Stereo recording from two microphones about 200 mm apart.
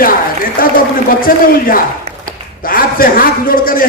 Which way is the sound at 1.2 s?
45° left (ahead or behind).